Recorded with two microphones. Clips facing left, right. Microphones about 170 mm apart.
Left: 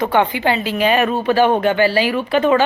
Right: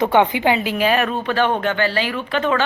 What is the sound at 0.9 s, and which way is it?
Speech, 5° left (ahead or behind).